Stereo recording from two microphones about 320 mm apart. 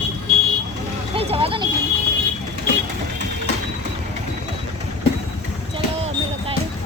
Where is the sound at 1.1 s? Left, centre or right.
Centre.